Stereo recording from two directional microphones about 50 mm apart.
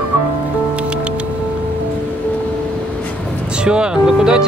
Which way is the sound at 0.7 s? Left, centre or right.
Right.